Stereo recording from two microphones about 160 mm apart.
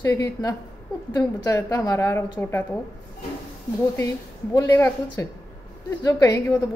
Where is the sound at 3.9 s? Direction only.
20° left (ahead or behind).